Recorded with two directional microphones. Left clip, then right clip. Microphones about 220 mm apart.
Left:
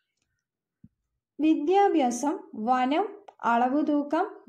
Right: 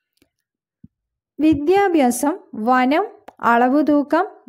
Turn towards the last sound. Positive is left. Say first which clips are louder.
# right 9 dB
turn(degrees=-50)  # may be behind; listen again after turning